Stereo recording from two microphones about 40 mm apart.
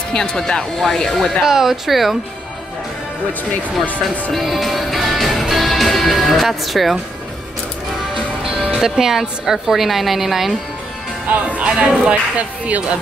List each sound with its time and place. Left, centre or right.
0.1 s speech: centre
1.4 s speech: centre
4.3 s music: centre
8.5 s a woman's voice: centre
11.2 s speech: right
11.6 s speech: right
12.1 s speech: right